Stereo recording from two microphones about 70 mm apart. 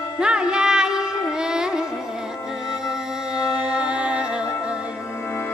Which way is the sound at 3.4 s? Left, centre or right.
Centre.